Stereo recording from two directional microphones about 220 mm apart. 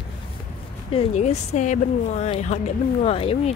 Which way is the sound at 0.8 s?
25° left (ahead or behind).